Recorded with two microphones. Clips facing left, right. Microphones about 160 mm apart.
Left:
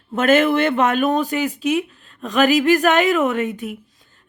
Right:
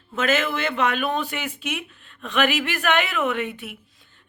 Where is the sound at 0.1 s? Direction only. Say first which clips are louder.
Left 8 dB; 50° left (ahead or behind).